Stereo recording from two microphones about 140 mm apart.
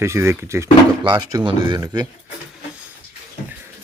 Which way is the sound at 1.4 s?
35° right (ahead or behind).